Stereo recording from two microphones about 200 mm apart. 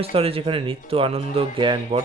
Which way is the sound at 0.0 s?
30° right (ahead or behind).